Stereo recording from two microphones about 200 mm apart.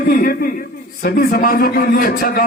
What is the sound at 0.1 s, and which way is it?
A man's voice, 45° left (ahead or behind).